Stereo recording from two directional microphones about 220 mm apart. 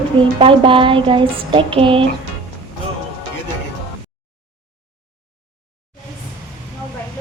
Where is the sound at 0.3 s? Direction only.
25° right (ahead or behind).